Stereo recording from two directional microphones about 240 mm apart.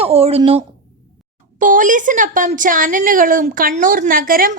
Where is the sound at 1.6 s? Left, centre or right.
Right.